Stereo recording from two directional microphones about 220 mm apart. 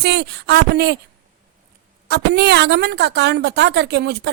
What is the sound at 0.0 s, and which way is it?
Speech, 50° right (ahead or behind).